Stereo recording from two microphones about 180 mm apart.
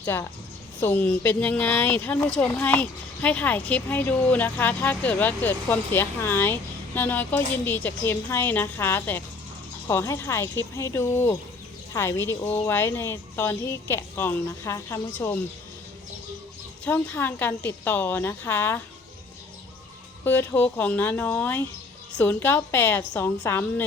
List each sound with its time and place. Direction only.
0.0 s a woman's voice: 15° left (ahead or behind)
16.8 s speech: 10° left (ahead or behind)
20.2 s speech: 10° left (ahead or behind)